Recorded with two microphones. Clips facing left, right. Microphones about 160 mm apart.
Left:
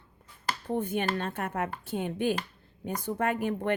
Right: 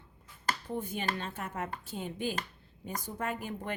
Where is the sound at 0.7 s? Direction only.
60° left (ahead or behind).